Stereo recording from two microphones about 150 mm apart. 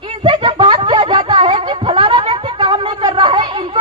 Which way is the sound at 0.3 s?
35° right (ahead or behind).